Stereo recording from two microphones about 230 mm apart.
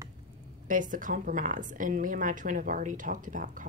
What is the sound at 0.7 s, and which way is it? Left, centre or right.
A woman's voice, right.